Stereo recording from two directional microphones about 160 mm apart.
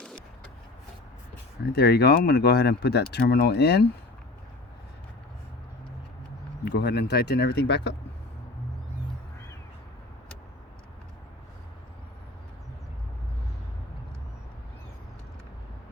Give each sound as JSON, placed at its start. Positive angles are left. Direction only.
{"t": 0.0, "sound": "vehicle", "side_deg": 5}
{"t": 1.6, "sound": "speech", "side_deg": 90}
{"t": 6.7, "sound": "speech", "side_deg": 90}